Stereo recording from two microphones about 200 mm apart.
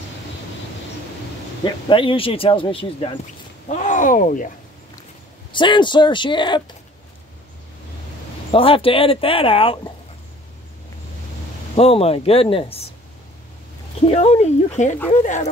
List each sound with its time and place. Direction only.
1.6 s speech: 25° left (ahead or behind); by 4.5 s 40° left (ahead or behind)
5.5 s speech: 25° left (ahead or behind)
8.5 s speech: 30° left (ahead or behind)
11.7 s speech: 30° left (ahead or behind)
14.0 s speech: 30° left (ahead or behind)